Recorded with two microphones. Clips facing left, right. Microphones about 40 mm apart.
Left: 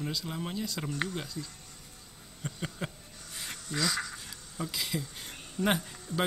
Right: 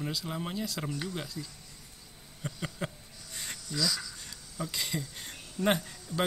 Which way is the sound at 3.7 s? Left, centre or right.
Left.